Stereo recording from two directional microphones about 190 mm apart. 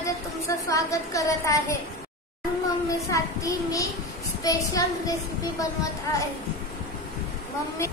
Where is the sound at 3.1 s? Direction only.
15° left (ahead or behind).